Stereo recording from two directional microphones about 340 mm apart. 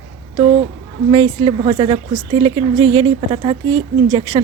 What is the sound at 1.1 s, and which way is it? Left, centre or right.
Speech, centre.